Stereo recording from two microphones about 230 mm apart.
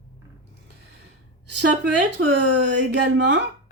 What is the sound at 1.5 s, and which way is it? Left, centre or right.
Speech, right.